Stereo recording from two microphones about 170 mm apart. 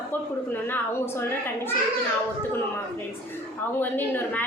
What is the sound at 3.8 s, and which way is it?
Speech, 10° left (ahead or behind).